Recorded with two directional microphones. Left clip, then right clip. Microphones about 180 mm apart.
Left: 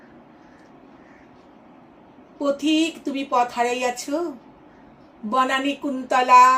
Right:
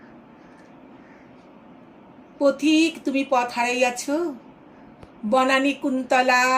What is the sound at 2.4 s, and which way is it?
A woman's voice, 20° right (ahead or behind).